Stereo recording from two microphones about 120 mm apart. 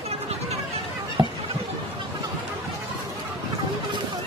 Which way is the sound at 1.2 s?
40° right (ahead or behind).